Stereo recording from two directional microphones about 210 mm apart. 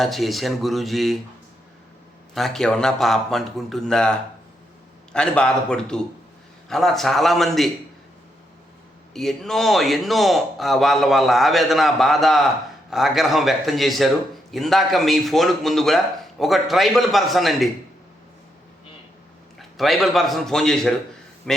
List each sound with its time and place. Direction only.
0.0 s a man's voice: centre (ahead or behind)
2.3 s a man's voice: centre (ahead or behind)
9.1 s a man's voice: centre (ahead or behind)
19.5 s a man's voice: centre (ahead or behind)